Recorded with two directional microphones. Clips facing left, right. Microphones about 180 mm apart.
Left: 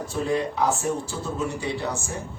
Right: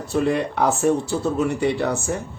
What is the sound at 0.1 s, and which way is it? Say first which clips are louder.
A man's voice: right 5 dB; 65° right (ahead or behind).